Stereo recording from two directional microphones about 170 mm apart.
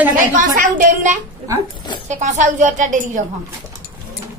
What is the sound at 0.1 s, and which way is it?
A woman's voice, 50° right (ahead or behind).